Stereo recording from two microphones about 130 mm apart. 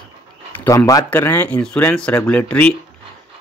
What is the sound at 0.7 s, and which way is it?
Speech, 25° left (ahead or behind).